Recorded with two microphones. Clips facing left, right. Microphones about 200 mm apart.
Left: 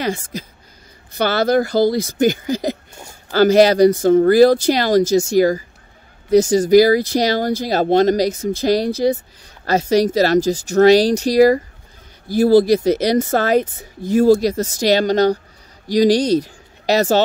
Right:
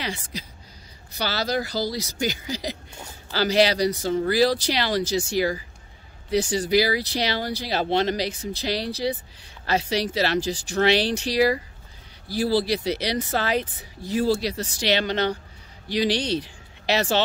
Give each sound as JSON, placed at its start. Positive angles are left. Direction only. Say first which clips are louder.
{"t": 0.0, "sound": "speech", "louder": "left 9 dB", "side_deg": 45}